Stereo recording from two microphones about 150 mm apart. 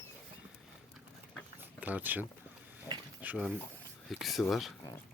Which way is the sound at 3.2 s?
10° right (ahead or behind).